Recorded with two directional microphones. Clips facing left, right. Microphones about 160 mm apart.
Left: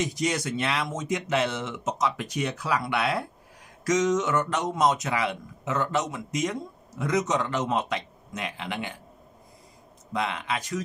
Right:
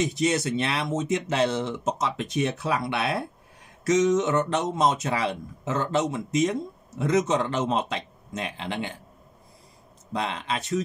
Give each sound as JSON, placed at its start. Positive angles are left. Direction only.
{"t": 0.3, "sound": "speech", "side_deg": -25}
{"t": 10.1, "sound": "speech", "side_deg": -30}